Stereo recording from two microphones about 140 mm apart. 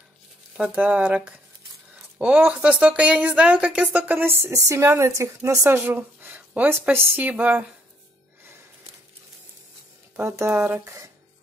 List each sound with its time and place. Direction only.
0.6 s speech: 10° right (ahead or behind)
10.1 s speech: 20° right (ahead or behind)